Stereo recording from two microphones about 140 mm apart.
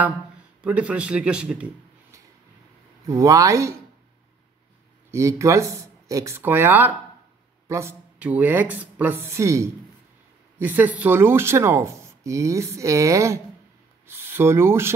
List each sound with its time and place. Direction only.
0.6 s speech: 10° right (ahead or behind)
3.1 s speech: 25° right (ahead or behind)
5.1 s speech: 20° right (ahead or behind)